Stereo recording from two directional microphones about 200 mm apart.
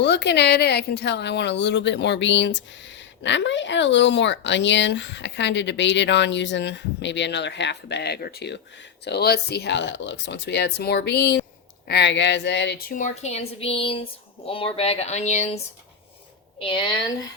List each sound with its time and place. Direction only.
0.0 s speech: 60° left (ahead or behind)
13.0 s speech: 35° left (ahead or behind)
16.6 s a woman's voice: 25° left (ahead or behind)